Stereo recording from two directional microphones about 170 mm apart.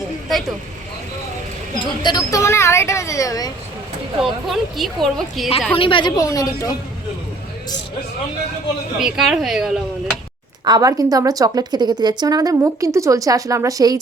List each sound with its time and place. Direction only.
1.8 s speech: 25° left (ahead or behind)
4.2 s speech: centre (ahead or behind)
5.7 s a woman's voice: 30° left (ahead or behind)
9.0 s speech: centre (ahead or behind)
10.7 s a woman's voice: 20° right (ahead or behind)